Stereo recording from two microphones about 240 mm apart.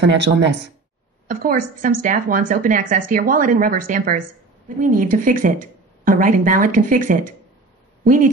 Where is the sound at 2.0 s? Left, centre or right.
Right.